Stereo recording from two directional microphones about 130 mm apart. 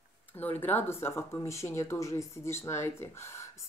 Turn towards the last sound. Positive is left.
turn(degrees=20)  # may be behind; listen again after turning